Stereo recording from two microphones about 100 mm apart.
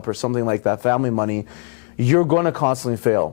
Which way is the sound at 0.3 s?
15° left (ahead or behind).